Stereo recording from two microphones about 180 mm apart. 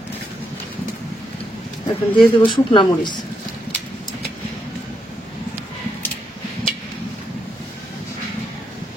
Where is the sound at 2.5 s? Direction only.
25° left (ahead or behind).